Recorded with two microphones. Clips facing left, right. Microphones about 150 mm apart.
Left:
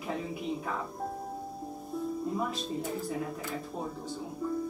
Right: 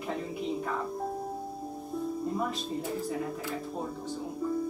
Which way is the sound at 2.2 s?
Centre (ahead or behind).